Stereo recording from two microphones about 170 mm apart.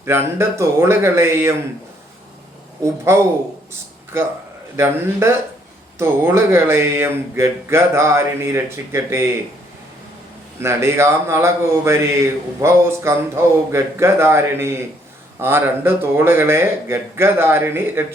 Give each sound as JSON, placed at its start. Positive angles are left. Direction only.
{"t": 0.0, "sound": "a man's voice", "side_deg": -15}
{"t": 2.8, "sound": "a man's voice", "side_deg": -15}
{"t": 3.7, "sound": "a sound", "side_deg": -15}
{"t": 6.0, "sound": "a man's voice", "side_deg": -15}
{"t": 10.6, "sound": "a man's voice", "side_deg": -15}